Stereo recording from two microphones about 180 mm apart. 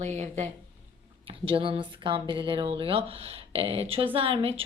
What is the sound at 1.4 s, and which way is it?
Speech, 30° right (ahead or behind).